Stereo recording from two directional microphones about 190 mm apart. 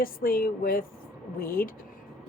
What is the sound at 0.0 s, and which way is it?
A woman's voice, 50° left (ahead or behind).